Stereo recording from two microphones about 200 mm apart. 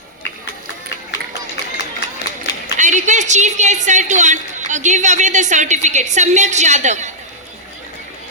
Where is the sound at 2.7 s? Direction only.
40° right (ahead or behind).